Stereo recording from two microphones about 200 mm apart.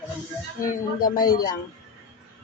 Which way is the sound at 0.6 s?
45° left (ahead or behind).